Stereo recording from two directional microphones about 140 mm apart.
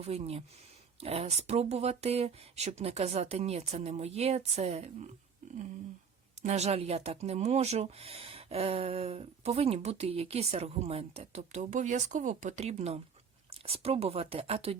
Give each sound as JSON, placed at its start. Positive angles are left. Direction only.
{"t": 0.0, "sound": "speech", "side_deg": -45}
{"t": 6.4, "sound": "speech", "side_deg": -50}